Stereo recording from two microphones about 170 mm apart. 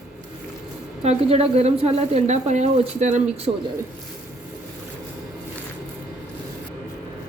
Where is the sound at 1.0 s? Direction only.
35° right (ahead or behind).